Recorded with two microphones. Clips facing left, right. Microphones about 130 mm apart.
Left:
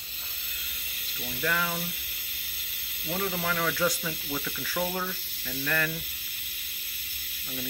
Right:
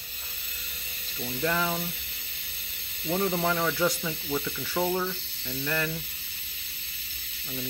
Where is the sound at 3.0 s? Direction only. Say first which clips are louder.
Right 4 dB; 30° right (ahead or behind).